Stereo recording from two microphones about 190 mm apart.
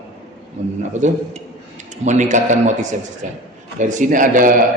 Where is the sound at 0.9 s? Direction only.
40° right (ahead or behind).